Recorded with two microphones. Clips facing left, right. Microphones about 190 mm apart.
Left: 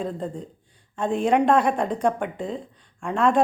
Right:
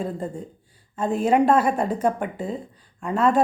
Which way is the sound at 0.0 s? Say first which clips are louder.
Right 1 dB; 5° right (ahead or behind).